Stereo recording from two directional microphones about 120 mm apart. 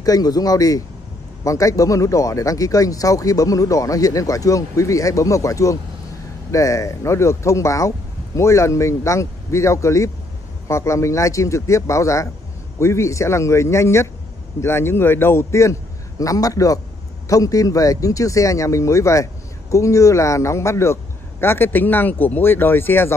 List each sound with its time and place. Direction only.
0.0 s speech: 30° left (ahead or behind)